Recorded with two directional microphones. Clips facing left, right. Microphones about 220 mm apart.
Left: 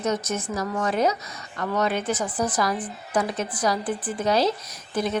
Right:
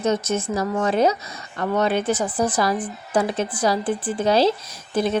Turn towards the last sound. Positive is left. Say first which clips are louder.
# right 4 dB
turn(degrees=-30)  # may be behind; listen again after turning